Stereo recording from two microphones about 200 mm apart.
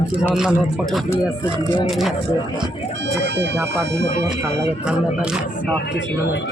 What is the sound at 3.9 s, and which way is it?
Speech, 60° right (ahead or behind).